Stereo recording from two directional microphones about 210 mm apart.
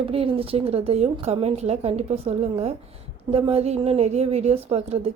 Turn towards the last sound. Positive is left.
turn(degrees=-30)  # may be behind; listen again after turning